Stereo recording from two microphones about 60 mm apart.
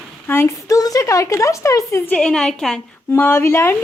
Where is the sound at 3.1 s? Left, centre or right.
Left.